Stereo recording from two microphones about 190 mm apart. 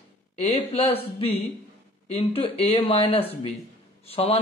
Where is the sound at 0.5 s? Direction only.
30° left (ahead or behind).